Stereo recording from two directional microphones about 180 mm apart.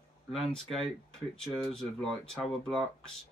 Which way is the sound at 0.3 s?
Centre (ahead or behind).